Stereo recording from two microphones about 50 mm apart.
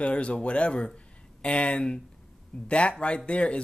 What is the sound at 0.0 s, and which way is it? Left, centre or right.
Speech, left.